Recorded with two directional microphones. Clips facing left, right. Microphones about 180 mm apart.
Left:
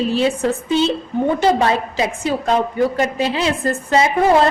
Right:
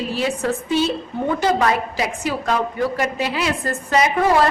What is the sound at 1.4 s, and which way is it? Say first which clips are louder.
A woman's voice: even; 30° left (ahead or behind).